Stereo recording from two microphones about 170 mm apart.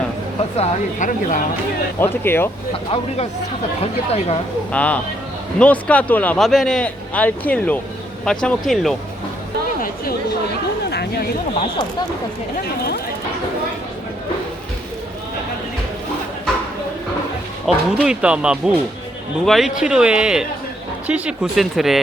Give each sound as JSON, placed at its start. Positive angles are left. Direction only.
{"t": 0.5, "sound": "speech", "side_deg": 45}
{"t": 2.2, "sound": "speech", "side_deg": 15}
{"t": 2.7, "sound": "speech", "side_deg": 35}
{"t": 4.7, "sound": "speech", "side_deg": 10}
{"t": 10.9, "sound": "a sound", "side_deg": 70}
{"t": 11.5, "sound": "speech", "side_deg": 30}
{"t": 17.7, "sound": "speech", "side_deg": -5}